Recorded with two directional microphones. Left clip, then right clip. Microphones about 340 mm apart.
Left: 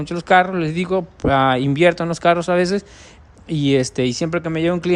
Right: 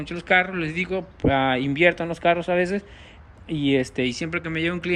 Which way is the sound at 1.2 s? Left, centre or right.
Right.